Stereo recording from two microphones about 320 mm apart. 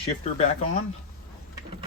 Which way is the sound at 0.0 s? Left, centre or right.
Centre.